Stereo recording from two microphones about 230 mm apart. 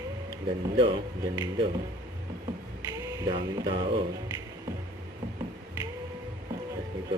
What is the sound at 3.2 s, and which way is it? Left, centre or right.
Music, centre.